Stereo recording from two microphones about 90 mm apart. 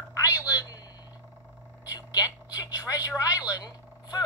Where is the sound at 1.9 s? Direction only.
45° left (ahead or behind).